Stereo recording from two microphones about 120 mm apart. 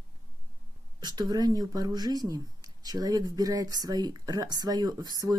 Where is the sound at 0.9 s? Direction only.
35° right (ahead or behind).